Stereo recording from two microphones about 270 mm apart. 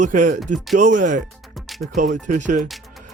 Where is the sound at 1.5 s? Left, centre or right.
Centre.